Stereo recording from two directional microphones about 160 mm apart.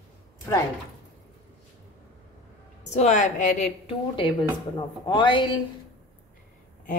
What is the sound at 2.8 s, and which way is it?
Speech, 45° left (ahead or behind).